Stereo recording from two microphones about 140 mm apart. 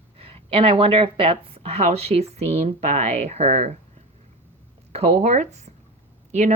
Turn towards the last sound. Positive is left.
turn(degrees=-55)  # may be behind; listen again after turning